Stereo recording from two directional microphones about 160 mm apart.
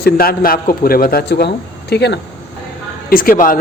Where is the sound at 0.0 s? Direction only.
70° left (ahead or behind); by 2.1 s 90° left.